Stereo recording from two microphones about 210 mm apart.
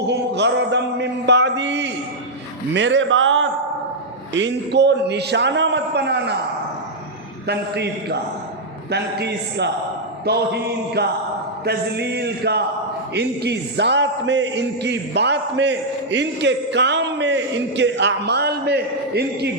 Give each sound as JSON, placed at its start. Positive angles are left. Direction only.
{"t": 0.1, "sound": "speech", "side_deg": -55}
{"t": 4.4, "sound": "speech", "side_deg": -55}
{"t": 7.4, "sound": "chant", "side_deg": -50}
{"t": 13.1, "sound": "speech", "side_deg": -50}